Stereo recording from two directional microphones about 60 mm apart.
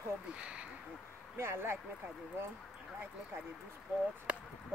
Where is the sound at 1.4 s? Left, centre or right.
Right.